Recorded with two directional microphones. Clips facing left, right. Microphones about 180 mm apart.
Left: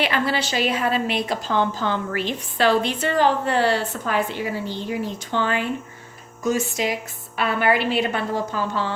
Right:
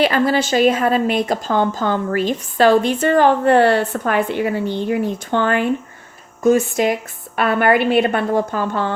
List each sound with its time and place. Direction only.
0.0 s a woman's voice: 45° right (ahead or behind)